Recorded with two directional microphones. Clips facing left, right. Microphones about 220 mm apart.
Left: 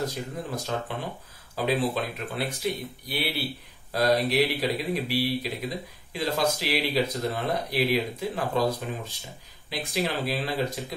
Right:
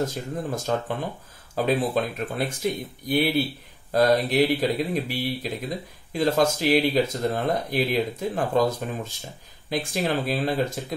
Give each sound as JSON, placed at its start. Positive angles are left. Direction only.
{"t": 0.0, "sound": "speech", "side_deg": -45}